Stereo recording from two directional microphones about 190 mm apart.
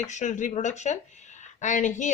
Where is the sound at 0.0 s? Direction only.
40° left (ahead or behind).